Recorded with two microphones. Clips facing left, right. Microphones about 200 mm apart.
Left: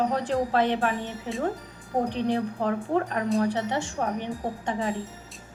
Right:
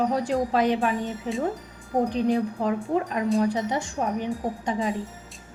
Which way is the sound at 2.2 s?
15° right (ahead or behind).